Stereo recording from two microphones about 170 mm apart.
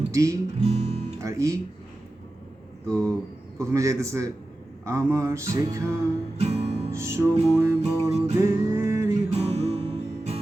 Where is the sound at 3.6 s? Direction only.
20° right (ahead or behind).